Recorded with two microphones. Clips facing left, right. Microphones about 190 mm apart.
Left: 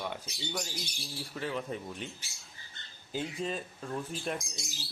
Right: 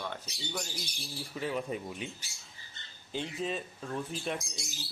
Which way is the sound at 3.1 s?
Centre (ahead or behind).